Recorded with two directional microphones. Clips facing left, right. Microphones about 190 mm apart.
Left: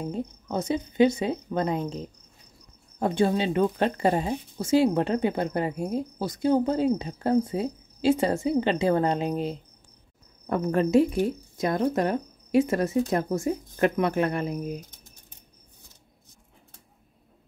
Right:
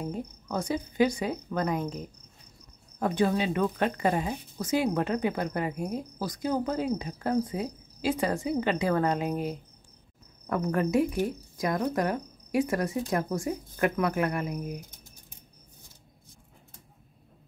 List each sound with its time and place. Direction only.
0.0 s a woman's voice: 25° left (ahead or behind)